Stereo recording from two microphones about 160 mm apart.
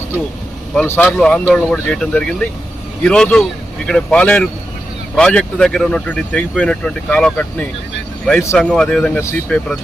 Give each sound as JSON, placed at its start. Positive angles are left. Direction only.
{"t": 0.9, "sound": "speech", "side_deg": 10}
{"t": 8.5, "sound": "speech", "side_deg": 5}